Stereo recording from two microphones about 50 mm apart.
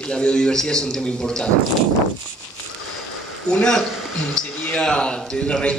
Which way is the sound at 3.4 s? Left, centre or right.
Centre.